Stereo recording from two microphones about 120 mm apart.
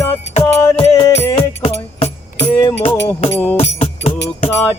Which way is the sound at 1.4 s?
55° left (ahead or behind).